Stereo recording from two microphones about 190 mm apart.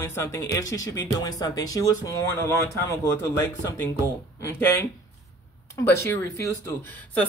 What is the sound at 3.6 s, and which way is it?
Speech, 15° left (ahead or behind).